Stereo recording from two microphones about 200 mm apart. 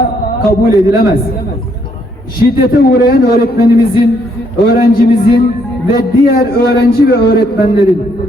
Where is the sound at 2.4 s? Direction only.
50° left (ahead or behind).